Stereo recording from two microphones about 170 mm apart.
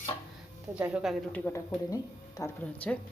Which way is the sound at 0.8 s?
5° right (ahead or behind).